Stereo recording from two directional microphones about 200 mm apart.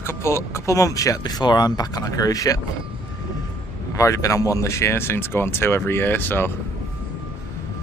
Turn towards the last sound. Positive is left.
turn(degrees=10)  # may be behind; listen again after turning